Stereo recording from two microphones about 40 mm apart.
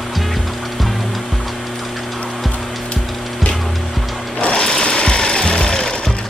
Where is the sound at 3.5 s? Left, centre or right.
Centre.